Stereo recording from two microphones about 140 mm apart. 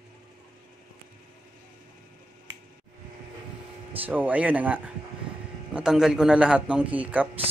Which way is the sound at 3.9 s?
10° right (ahead or behind).